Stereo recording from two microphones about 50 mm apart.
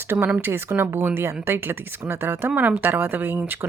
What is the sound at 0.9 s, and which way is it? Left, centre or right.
Speech, right.